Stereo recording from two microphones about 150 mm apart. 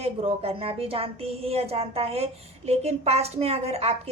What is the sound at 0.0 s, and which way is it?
A woman's voice, 40° right (ahead or behind).